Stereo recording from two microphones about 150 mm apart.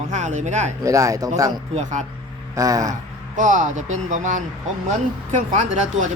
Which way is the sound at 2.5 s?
25° right (ahead or behind).